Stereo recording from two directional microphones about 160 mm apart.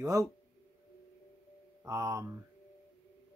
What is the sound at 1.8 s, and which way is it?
Speech, 20° right (ahead or behind).